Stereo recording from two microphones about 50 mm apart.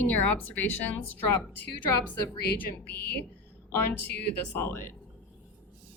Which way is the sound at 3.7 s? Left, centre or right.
Left.